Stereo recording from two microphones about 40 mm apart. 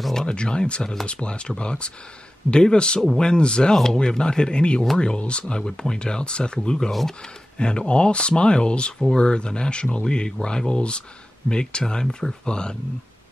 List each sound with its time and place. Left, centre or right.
0.1 s speech: centre
3.7 s speech: centre
4.0 s speech: left